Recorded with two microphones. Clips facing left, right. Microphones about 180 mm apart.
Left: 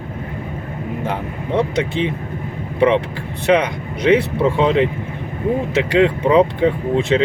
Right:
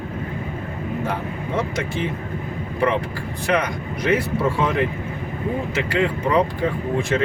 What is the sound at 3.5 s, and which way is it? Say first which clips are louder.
Speech: left 6 dB; 25° left (ahead or behind).